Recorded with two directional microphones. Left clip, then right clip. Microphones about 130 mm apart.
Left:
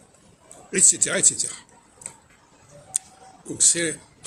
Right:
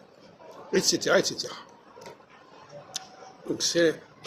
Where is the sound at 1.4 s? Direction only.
25° left (ahead or behind).